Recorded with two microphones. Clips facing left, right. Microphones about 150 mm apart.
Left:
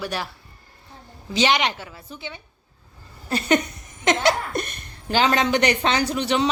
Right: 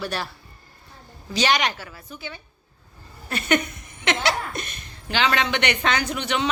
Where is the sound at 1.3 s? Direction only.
20° left (ahead or behind).